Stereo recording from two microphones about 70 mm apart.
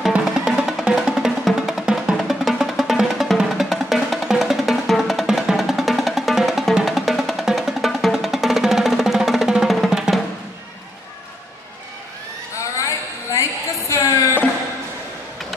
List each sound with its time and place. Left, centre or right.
0.5 s music: centre
9.8 s drum: centre
12.5 s a sound: left